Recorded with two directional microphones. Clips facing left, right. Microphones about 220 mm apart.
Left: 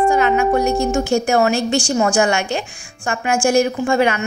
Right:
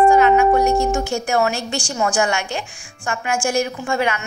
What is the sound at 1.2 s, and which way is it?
A woman's voice, 30° left (ahead or behind).